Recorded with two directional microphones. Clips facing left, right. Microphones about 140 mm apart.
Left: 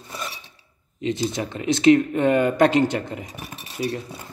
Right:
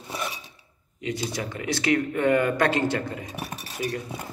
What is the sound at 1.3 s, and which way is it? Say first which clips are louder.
A man's voice: left 5 dB; 25° left (ahead or behind).